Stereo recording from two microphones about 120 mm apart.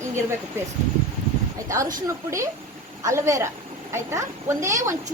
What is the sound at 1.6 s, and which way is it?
Speech, 25° right (ahead or behind).